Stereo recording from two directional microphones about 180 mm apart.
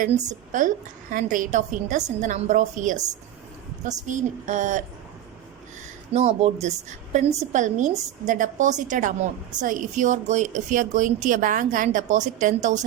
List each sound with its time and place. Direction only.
0.0 s a woman's voice: 45° right (ahead or behind)
6.1 s a woman's voice: 35° right (ahead or behind)